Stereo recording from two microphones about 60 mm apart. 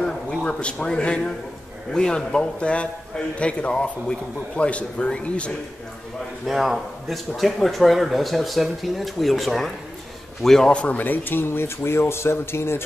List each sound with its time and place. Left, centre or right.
0.0 s a sound: centre
1.9 s a man's voice: centre
6.4 s a man's voice: centre
10.7 s a man's voice: centre
11.0 s speech: left